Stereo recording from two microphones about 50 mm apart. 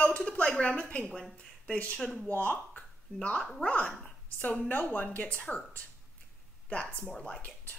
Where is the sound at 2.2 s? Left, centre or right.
Left.